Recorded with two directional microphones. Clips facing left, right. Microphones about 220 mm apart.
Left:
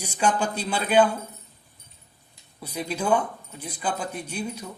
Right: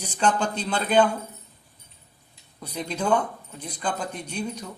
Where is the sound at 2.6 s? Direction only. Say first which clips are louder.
Even; 10° left (ahead or behind).